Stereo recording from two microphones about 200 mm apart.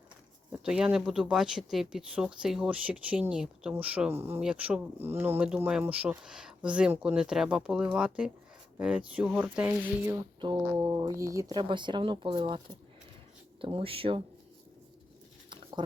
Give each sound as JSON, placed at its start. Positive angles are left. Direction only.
{"t": 0.6, "sound": "speech", "side_deg": -5}